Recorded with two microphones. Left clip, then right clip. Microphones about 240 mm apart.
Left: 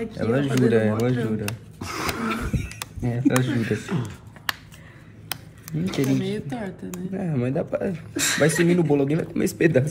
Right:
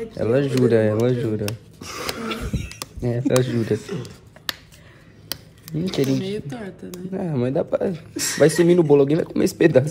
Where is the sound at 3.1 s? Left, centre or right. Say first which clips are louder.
Right 2 dB; right.